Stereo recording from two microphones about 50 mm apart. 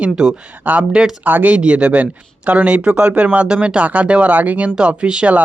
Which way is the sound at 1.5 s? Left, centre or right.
Right.